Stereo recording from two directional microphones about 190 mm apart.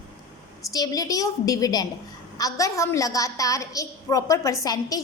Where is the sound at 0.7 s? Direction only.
20° left (ahead or behind).